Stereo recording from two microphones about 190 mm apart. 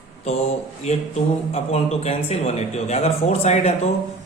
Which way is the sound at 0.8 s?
35° left (ahead or behind).